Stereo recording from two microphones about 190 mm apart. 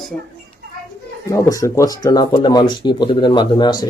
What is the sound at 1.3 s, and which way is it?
Speech, 15° left (ahead or behind).